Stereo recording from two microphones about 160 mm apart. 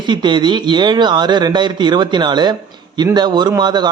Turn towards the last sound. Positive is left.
turn(degrees=-25)  # may be behind; listen again after turning